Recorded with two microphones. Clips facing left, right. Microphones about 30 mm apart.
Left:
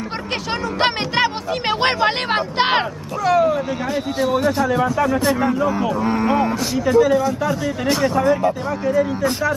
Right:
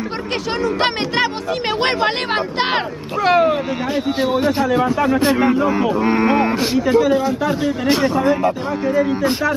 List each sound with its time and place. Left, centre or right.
0.7 s speech: centre
3.3 s speech: right
3.9 s speech: right
6.8 s speech: centre